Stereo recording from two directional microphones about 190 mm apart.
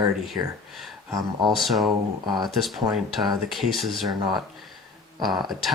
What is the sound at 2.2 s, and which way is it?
Speech, 20° right (ahead or behind).